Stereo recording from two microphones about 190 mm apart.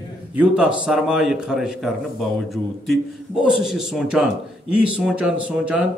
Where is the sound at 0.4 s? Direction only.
5° right (ahead or behind).